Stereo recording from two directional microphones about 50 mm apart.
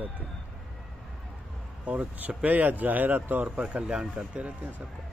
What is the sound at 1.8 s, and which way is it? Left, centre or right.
Speech, right.